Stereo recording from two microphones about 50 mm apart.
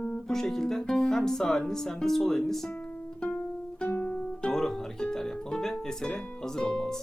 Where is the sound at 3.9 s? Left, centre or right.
Left.